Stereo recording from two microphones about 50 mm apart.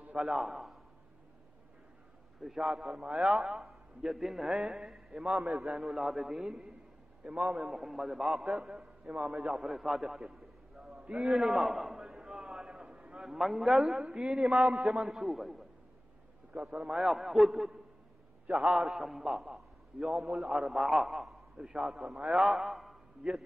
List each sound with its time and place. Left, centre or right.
0.2 s a man's voice: centre
2.4 s a man's voice: centre
9.5 s a man's voice: centre
10.8 s a sound: centre
11.1 s a man's voice: centre
14.5 s a man's voice: right
15.0 s a man's voice: centre
16.7 s a man's voice: centre
18.6 s a man's voice: centre
20.2 s a man's voice: centre
20.7 s a man's voice: centre
21.5 s a man's voice: centre